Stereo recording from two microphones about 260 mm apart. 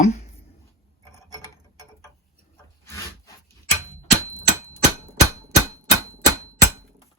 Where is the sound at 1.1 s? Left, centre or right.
Centre.